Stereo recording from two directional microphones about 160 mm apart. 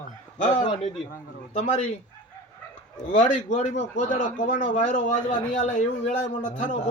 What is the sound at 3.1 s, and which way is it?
Speech, 50° left (ahead or behind).